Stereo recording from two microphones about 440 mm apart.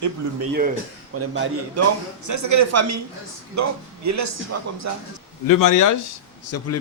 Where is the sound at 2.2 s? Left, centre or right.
Right.